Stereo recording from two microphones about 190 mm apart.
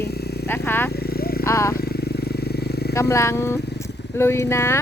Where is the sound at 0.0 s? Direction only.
60° left (ahead or behind).